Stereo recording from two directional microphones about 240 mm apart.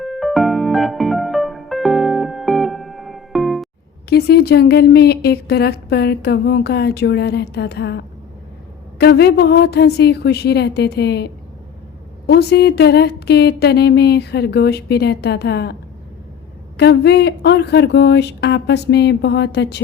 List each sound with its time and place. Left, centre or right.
0.0 s music: centre
4.1 s a woman's voice: left
16.7 s a woman's voice: left